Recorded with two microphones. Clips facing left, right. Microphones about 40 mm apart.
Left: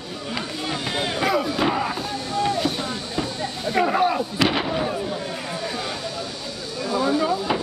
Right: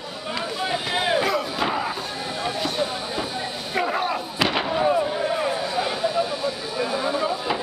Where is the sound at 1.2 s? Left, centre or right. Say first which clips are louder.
Left 2 dB; centre.